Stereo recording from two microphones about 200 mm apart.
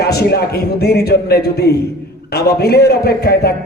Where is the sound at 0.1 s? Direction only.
55° left (ahead or behind).